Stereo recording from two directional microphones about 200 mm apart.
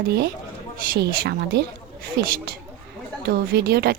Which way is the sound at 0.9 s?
55° right (ahead or behind).